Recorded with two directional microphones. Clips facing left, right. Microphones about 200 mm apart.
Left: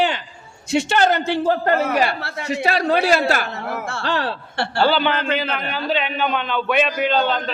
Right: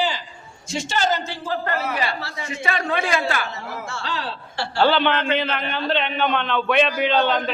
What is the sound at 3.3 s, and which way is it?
Speech, 50° left (ahead or behind).